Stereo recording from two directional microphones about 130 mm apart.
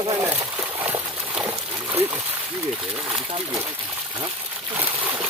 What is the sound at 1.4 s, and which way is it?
Splash, 15° right (ahead or behind).